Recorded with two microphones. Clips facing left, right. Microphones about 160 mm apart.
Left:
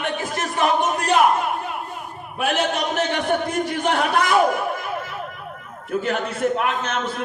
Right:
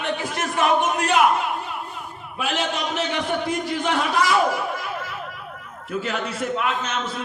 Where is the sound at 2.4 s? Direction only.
55° left (ahead or behind).